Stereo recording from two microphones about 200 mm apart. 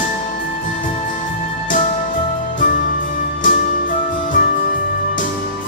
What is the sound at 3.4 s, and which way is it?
Music, 40° left (ahead or behind).